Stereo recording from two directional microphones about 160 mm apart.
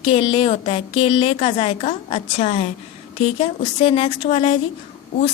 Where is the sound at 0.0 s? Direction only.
35° left (ahead or behind).